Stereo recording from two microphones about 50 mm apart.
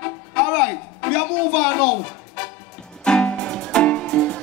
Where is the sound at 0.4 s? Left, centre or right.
Centre.